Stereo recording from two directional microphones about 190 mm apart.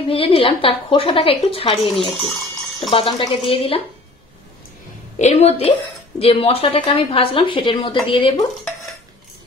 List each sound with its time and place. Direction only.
0.1 s a woman's voice: 30° left (ahead or behind)
2.2 s a sound: centre (ahead or behind)
2.9 s a woman's voice: 25° left (ahead or behind)
5.2 s a woman's voice: 30° left (ahead or behind)